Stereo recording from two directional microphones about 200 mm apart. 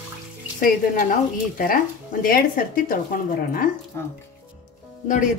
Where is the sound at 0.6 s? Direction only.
40° left (ahead or behind).